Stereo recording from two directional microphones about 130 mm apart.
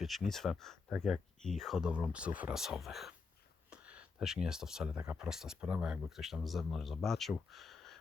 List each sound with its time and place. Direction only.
0.3 s speech: 5° left (ahead or behind)